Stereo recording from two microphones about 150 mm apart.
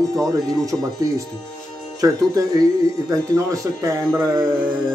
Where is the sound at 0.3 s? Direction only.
20° right (ahead or behind).